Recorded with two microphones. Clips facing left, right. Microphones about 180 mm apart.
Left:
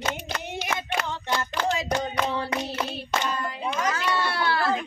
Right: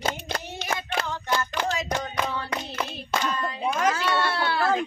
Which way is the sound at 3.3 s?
10° left (ahead or behind).